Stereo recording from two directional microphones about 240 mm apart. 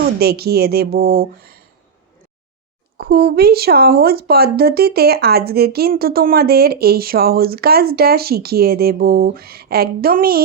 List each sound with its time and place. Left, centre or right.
0.0 s speech: right
3.1 s speech: right